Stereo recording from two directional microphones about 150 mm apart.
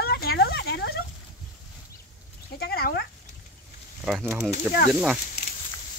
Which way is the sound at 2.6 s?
90° left.